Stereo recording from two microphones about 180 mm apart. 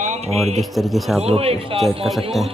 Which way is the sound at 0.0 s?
40° right (ahead or behind).